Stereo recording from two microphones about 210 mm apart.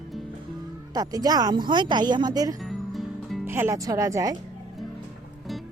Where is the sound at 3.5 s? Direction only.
10° right (ahead or behind).